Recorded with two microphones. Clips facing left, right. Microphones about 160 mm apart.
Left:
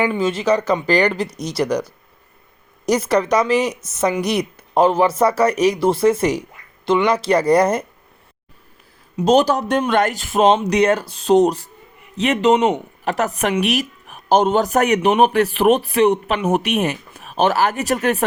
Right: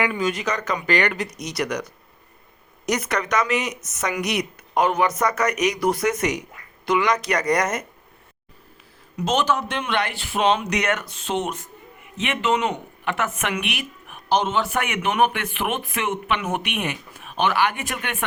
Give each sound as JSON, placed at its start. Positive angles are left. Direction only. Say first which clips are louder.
{"t": 0.0, "sound": "speech", "louder": "left 5 dB", "side_deg": 30}
{"t": 9.1, "sound": "speech", "louder": "left 7 dB", "side_deg": 35}